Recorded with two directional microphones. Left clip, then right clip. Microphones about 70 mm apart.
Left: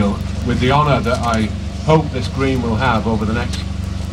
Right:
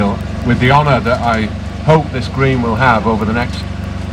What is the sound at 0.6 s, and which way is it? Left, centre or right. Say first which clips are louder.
Speech: right 3 dB; right.